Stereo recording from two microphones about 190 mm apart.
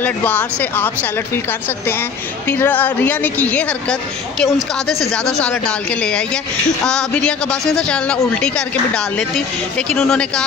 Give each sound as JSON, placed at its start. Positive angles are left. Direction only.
{"t": 0.0, "sound": "a woman's voice", "side_deg": 10}